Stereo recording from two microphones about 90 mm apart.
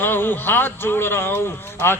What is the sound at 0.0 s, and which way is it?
A man's voice, 25° left (ahead or behind).